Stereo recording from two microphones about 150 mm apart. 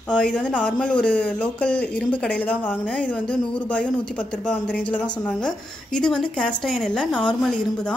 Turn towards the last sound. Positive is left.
turn(degrees=5)  # may be behind; listen again after turning